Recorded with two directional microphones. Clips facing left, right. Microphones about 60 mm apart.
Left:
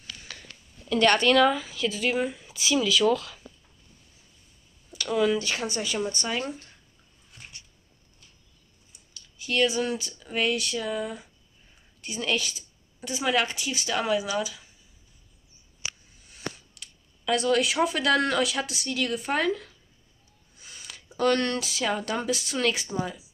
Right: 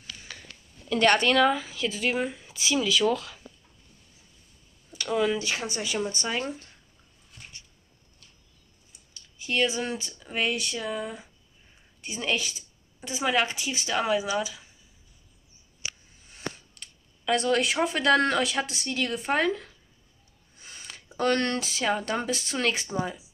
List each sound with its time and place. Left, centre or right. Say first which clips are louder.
0.3 s a sound: even; right
0.8 s speech: left 1 dB; right
4.9 s speech: left 2 dB; centre
9.1 s speech: left 1 dB; right
16.3 s a sound: even; right
17.2 s speech: left 1 dB; right
20.5 s a sound: right 1 dB; right
22.0 s speech: left 1 dB; right
22.9 s speech: right 1 dB; centre